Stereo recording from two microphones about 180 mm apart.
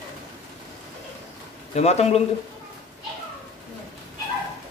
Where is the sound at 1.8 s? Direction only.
35° left (ahead or behind).